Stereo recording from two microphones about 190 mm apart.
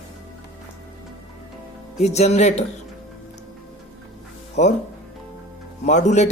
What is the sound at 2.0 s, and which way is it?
Speech, 35° left (ahead or behind).